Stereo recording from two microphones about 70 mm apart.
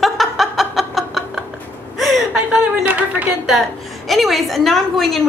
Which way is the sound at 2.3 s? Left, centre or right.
Right.